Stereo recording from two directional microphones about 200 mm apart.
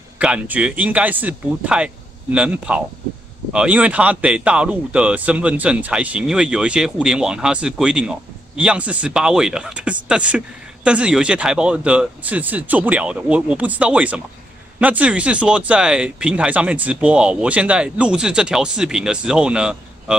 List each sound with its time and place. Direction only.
0.2 s speech: 5° right (ahead or behind)